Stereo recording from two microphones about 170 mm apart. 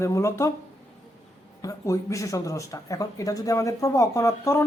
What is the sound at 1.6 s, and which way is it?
Speech, 20° left (ahead or behind).